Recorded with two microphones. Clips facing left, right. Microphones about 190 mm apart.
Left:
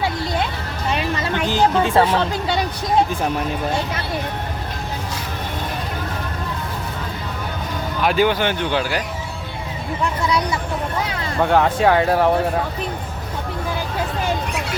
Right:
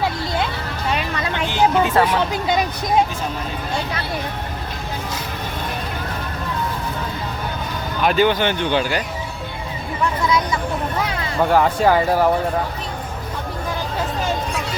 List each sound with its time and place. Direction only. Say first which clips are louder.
1.5 s speech: even; 35° left (ahead or behind)
2.3 s speech: right 2 dB; 15° right (ahead or behind)
8.0 s speech: right 1 dB; 10° left (ahead or behind)
11.4 s speech: even; centre (ahead or behind)